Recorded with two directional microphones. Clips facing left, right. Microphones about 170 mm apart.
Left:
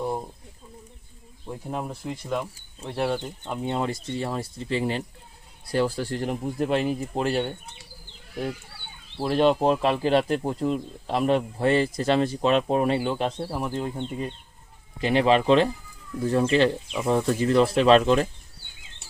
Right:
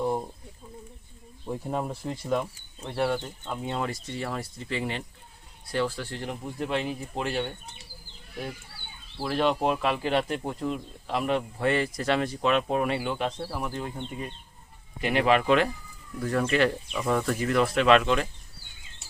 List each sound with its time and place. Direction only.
1.5 s speech: centre (ahead or behind)
2.9 s speech: 20° left (ahead or behind); by 7.4 s 35° left (ahead or behind)
9.1 s speech: 30° left (ahead or behind)